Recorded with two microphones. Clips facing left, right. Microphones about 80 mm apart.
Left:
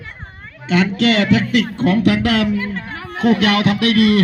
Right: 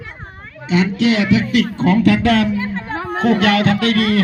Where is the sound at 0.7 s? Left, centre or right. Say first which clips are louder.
Even; left.